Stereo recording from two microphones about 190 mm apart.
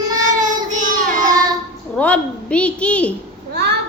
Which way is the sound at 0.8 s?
45° right (ahead or behind).